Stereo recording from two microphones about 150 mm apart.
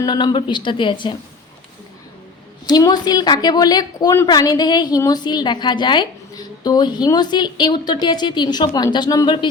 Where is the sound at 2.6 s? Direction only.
25° left (ahead or behind).